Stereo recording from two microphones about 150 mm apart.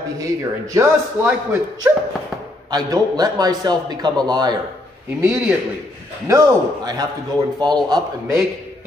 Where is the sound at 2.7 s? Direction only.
25° right (ahead or behind).